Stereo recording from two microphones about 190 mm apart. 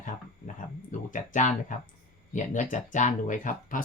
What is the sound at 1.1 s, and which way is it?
Speech, 40° left (ahead or behind).